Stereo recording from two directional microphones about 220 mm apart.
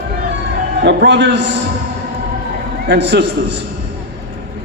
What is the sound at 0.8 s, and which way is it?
Speech, 50° right (ahead or behind).